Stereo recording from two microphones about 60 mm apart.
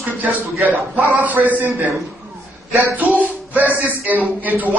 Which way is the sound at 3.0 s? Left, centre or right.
Right.